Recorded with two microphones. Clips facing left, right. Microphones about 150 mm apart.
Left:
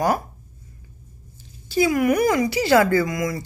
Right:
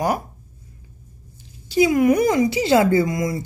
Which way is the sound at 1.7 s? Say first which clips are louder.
Right 3 dB; 20° right (ahead or behind).